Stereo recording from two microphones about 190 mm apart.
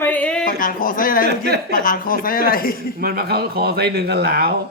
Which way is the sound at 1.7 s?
45° left (ahead or behind).